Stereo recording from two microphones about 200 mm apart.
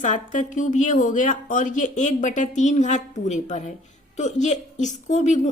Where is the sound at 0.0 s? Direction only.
40° left (ahead or behind).